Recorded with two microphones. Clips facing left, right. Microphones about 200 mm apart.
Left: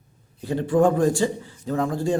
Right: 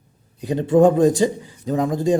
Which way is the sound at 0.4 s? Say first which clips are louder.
Right 5 dB; 20° right (ahead or behind).